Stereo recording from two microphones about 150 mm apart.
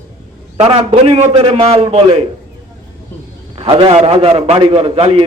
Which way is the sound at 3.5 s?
35° right (ahead or behind).